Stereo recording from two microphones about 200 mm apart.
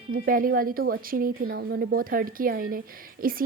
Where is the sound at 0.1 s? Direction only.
45° right (ahead or behind).